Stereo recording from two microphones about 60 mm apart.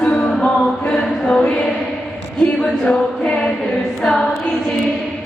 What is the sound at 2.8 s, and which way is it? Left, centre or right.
Music, centre.